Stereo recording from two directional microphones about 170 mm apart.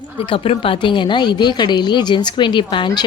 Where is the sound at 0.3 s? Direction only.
35° left (ahead or behind).